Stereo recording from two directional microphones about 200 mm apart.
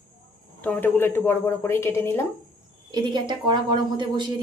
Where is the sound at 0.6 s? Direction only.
10° left (ahead or behind).